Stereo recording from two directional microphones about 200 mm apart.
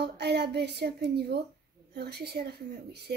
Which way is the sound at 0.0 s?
55° right (ahead or behind).